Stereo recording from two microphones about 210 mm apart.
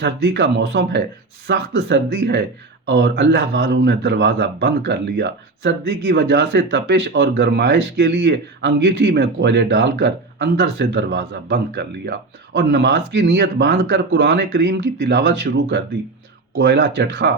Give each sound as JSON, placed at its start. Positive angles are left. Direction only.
{"t": 0.0, "sound": "a man's voice", "side_deg": -55}